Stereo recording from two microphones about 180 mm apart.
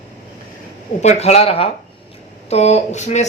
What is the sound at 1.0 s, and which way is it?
Speech, 35° left (ahead or behind).